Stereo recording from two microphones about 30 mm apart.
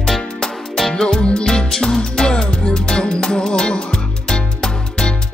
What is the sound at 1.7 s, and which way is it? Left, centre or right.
Music, centre.